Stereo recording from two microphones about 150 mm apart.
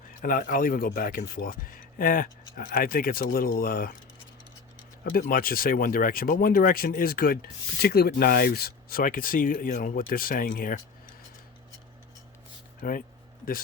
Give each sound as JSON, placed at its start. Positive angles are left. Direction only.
{"t": 0.1, "sound": "speech", "side_deg": 65}
{"t": 5.0, "sound": "speech", "side_deg": 70}
{"t": 12.8, "sound": "speech", "side_deg": 60}